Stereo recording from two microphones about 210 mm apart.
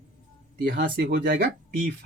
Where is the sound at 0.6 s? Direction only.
55° right (ahead or behind).